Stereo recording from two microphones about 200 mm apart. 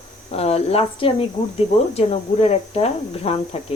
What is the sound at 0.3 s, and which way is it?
Speech, 30° left (ahead or behind).